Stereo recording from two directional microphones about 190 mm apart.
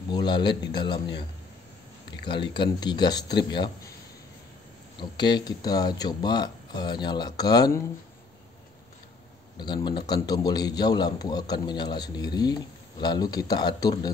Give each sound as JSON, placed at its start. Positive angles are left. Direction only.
{"t": 0.1, "sound": "a man's voice", "side_deg": 25}
{"t": 2.2, "sound": "a man's voice", "side_deg": 25}
{"t": 5.1, "sound": "a man's voice", "side_deg": 25}
{"t": 9.6, "sound": "a man's voice", "side_deg": 25}